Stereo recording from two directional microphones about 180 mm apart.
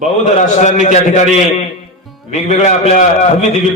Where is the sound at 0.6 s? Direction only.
40° left (ahead or behind).